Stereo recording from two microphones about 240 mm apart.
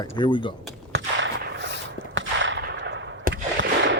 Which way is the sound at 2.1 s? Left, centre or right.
Right.